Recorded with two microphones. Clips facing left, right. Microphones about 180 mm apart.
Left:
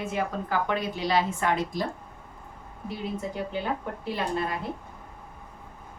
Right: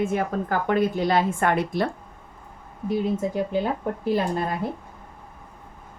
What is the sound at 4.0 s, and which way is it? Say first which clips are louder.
Speech: right 8 dB; 45° right (ahead or behind).